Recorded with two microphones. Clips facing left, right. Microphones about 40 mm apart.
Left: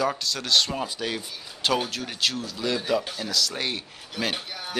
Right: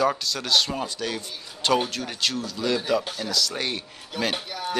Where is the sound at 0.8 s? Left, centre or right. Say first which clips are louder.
Even; centre.